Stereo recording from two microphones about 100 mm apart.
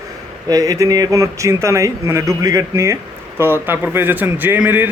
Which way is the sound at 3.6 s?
20° right (ahead or behind).